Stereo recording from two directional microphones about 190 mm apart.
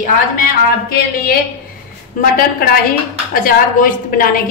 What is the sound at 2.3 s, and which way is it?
A woman's voice, 50° left (ahead or behind).